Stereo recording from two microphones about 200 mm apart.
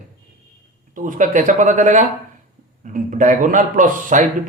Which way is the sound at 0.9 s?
40° right (ahead or behind).